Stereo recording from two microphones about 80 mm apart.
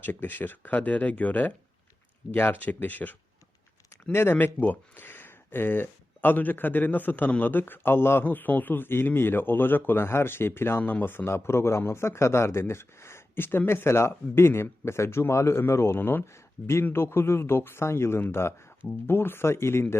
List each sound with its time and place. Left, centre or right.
0.0 s speech: left